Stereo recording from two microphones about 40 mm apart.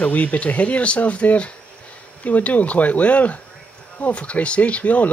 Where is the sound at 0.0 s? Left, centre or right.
Left.